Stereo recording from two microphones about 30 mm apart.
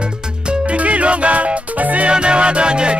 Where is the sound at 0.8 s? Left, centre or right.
Right.